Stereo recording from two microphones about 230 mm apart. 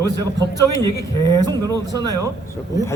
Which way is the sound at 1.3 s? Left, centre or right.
Centre.